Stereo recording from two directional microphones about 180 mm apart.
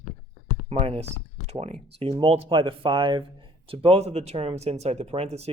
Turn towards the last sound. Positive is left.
turn(degrees=-35)  # may be behind; listen again after turning